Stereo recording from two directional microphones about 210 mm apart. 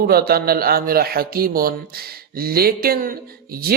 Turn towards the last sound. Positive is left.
turn(degrees=-45)  # may be behind; listen again after turning